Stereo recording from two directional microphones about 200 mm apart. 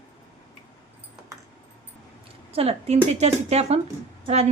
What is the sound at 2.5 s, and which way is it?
Speech, 30° right (ahead or behind).